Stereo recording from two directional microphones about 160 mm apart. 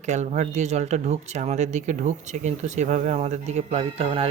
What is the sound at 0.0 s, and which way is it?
Speech, 45° right (ahead or behind).